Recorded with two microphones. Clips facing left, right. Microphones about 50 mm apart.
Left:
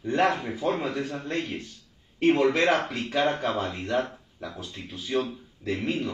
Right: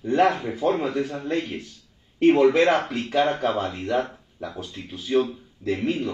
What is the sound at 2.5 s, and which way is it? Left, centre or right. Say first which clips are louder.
A man's voice: right 4 dB; centre.